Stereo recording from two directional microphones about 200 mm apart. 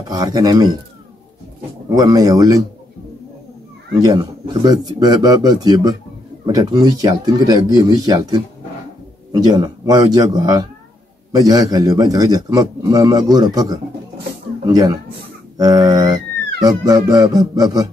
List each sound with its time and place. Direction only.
0.1 s speech: 20° right (ahead or behind)
1.9 s speech: 20° right (ahead or behind)
4.0 s speech: 20° right (ahead or behind)